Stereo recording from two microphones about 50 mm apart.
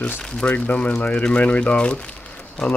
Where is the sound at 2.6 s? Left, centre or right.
Centre.